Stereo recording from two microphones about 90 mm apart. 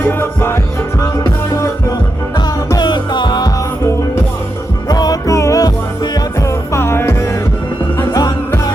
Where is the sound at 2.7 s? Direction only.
60° left (ahead or behind).